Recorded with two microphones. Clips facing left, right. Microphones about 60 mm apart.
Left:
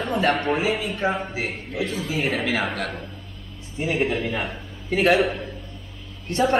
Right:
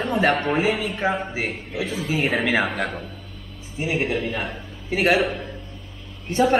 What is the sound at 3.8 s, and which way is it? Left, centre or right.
A man's voice, centre.